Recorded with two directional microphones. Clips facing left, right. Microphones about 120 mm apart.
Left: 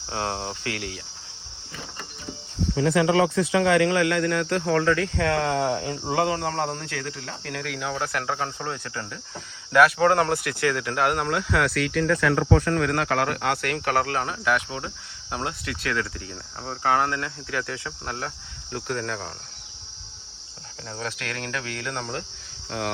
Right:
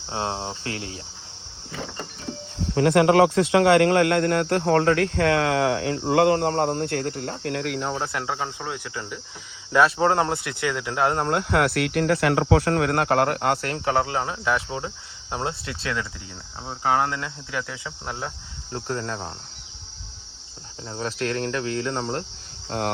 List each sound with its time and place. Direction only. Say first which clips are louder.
0.1 s speech: right 1 dB; 25° right (ahead or behind)
2.7 s speech: right 4 dB; 60° right (ahead or behind); by 6.8 s 40° right (ahead or behind)
6.8 s speech: right 7 dB; 50° right (ahead or behind)
7.9 s cricket: even; 20° right (ahead or behind)
9.7 s speech: left 1 dB; 25° right (ahead or behind)
11.3 s speech: right 2 dB; 50° right (ahead or behind)
13.7 s speech: right 1 dB; 20° right (ahead or behind)
20.9 s cricket: right 6 dB; 30° right (ahead or behind)